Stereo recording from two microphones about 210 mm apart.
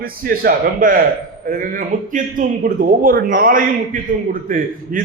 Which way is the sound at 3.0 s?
45° right (ahead or behind).